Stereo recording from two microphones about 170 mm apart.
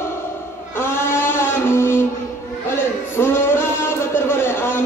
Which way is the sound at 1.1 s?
15° left (ahead or behind).